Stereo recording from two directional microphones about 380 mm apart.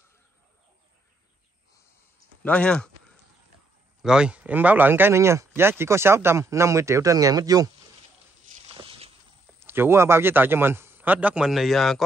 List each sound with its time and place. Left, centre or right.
2.4 s speech: centre
4.0 s speech: centre
8.5 s a sound: centre
9.6 s speech: centre